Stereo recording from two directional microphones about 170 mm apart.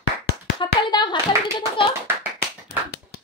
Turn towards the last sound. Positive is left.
turn(degrees=70)  # may be behind; listen again after turning